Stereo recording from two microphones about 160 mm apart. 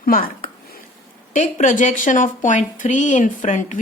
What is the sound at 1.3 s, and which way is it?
A woman's voice, 55° left (ahead or behind).